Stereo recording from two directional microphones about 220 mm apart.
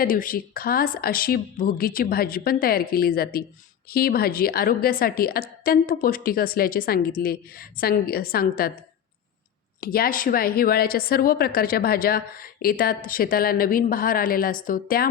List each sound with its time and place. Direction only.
0.0 s a woman's voice: 40° left (ahead or behind)
9.8 s a woman's voice: 40° left (ahead or behind)